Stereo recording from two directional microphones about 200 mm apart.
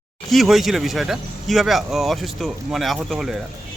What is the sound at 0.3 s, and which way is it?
Speech, centre (ahead or behind).